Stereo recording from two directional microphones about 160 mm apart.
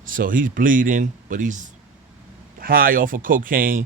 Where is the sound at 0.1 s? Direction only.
60° right (ahead or behind).